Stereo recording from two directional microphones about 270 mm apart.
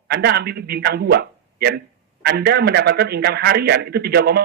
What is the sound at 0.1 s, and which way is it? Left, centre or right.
A man's voice, right.